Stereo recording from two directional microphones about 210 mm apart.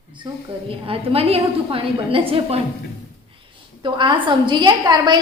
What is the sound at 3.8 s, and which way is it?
A woman's voice, 20° right (ahead or behind).